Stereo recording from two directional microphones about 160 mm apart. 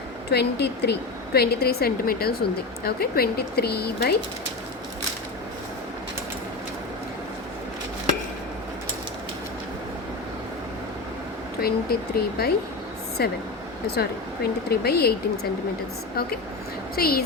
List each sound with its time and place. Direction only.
0.3 s a woman's voice: 90° left
11.6 s a woman's voice: 75° left (ahead or behind)
16.9 s speech: 70° left (ahead or behind)